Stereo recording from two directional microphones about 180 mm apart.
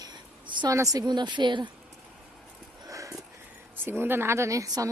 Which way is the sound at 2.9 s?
20° right (ahead or behind).